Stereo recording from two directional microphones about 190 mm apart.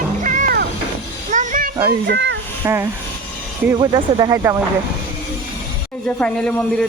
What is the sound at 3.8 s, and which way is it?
Speech, 25° right (ahead or behind).